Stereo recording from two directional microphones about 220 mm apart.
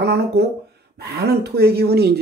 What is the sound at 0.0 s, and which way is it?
Speech, 50° right (ahead or behind).